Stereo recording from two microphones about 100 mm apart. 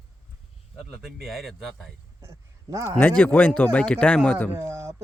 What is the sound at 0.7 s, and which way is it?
Speech, 5° right (ahead or behind).